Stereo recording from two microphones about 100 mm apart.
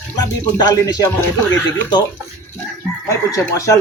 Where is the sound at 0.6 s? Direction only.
40° left (ahead or behind).